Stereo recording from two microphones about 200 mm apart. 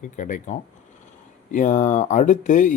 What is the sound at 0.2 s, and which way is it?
Speech, 40° left (ahead or behind).